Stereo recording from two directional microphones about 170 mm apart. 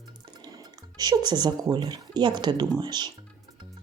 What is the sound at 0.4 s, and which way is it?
Speech, 25° right (ahead or behind).